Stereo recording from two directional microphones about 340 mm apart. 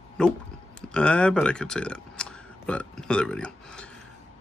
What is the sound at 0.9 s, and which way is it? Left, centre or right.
Speech, centre.